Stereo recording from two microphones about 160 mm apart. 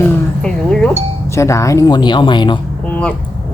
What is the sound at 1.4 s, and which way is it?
Speech, 20° left (ahead or behind).